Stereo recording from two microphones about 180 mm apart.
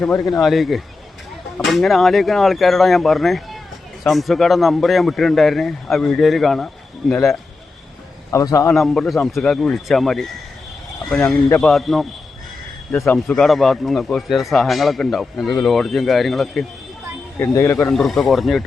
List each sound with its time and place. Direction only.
0.0 s a man's voice: 5° left (ahead or behind)
8.3 s a man's voice: 15° left (ahead or behind)
8.7 s a man's voice: centre (ahead or behind)
11.4 s a man's voice: 10° left (ahead or behind)
11.7 s a man's voice: centre (ahead or behind)
12.9 s a man's voice: 10° left (ahead or behind)
17.4 s a man's voice: 15° left (ahead or behind)
17.9 s a man's voice: centre (ahead or behind)